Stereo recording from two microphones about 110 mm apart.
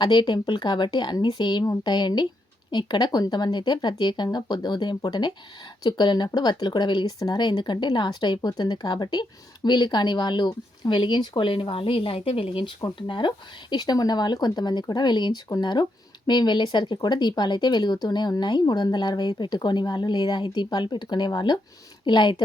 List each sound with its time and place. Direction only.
0.0 s speech: 40° left (ahead or behind)